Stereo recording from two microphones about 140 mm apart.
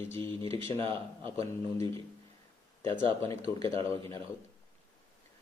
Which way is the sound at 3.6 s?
40° right (ahead or behind).